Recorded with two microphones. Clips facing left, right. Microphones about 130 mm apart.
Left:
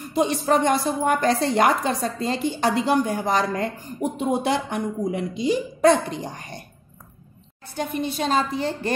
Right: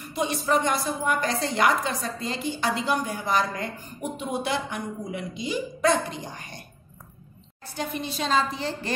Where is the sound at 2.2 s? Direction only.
45° left (ahead or behind).